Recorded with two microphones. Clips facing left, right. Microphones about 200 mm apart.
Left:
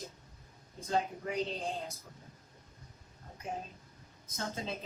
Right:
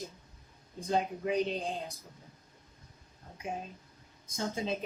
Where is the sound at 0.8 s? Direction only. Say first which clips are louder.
Right 2 dB; 15° right (ahead or behind).